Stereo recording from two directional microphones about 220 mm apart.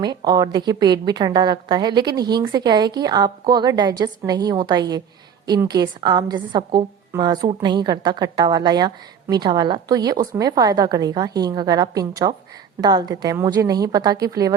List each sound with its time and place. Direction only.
0.0 s a woman's voice: 20° right (ahead or behind)